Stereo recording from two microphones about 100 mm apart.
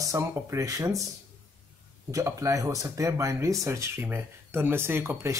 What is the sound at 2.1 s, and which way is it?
Speech, 30° right (ahead or behind).